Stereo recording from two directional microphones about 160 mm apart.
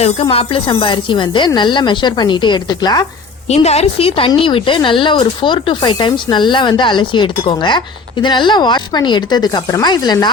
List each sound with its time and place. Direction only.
0.0 s speech: 35° left (ahead or behind)
3.5 s speech: 40° left (ahead or behind); by 10.2 s 25° left (ahead or behind)